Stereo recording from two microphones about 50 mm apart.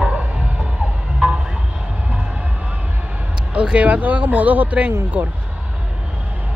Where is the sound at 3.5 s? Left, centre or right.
Right.